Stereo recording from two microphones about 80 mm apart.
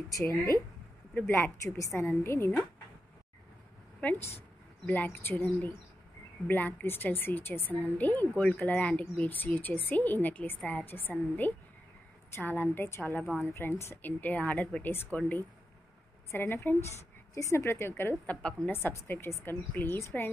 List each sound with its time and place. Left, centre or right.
1.1 s speech: left
1.9 s speech: left
4.0 s speech: left
17.3 s speech: left; by 18.7 s centre
18.7 s speech: left
20.0 s speech: left